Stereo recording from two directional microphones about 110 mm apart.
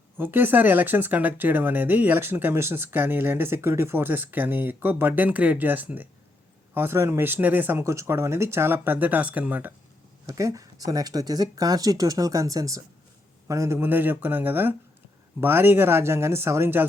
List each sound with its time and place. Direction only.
0.2 s speech: 20° right (ahead or behind)
10.2 s speech: 30° right (ahead or behind)